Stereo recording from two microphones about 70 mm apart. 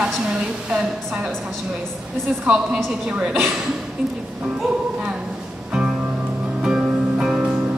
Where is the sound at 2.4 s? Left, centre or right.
Centre.